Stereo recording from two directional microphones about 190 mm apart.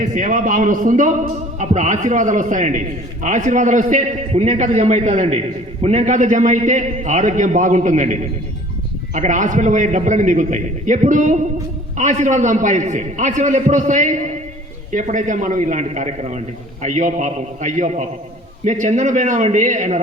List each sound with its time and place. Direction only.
0.0 s a man's voice: 45° right (ahead or behind)